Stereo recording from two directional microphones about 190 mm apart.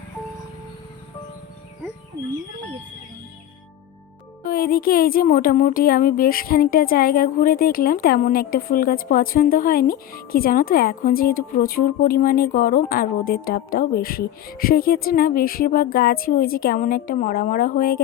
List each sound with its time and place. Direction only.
4.4 s a woman's voice: 50° left (ahead or behind)